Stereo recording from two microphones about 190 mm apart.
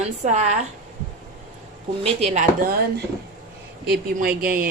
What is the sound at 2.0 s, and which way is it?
Speech, 35° right (ahead or behind).